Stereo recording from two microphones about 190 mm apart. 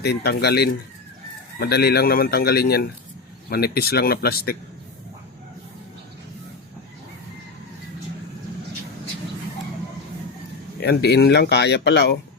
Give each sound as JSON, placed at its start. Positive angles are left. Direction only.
{"t": 0.0, "sound": "speech", "side_deg": 60}
{"t": 10.8, "sound": "speech", "side_deg": 55}